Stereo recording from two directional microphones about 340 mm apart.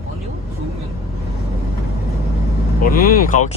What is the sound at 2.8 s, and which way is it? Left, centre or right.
Speech, left.